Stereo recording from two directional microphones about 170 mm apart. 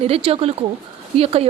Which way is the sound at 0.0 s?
35° right (ahead or behind).